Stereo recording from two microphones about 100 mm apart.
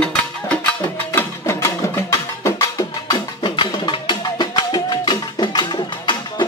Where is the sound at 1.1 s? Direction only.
25° left (ahead or behind).